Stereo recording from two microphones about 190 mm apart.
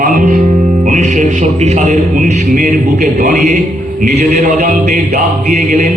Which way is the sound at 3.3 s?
35° right (ahead or behind).